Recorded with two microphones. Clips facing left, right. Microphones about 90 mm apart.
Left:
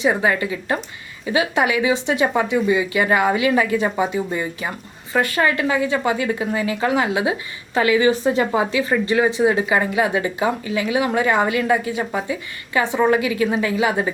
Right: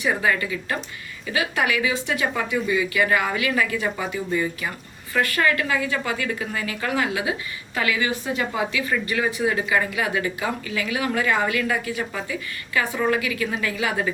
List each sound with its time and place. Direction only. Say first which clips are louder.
0.0 s a woman's voice: left 4 dB; 25° left (ahead or behind)